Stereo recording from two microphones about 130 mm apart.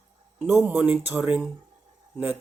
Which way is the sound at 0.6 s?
15° right (ahead or behind).